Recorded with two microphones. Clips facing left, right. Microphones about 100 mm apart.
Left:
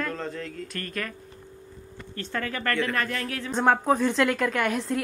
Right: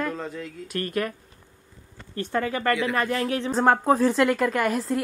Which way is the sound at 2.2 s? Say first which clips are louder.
Right 5 dB; 15° right (ahead or behind).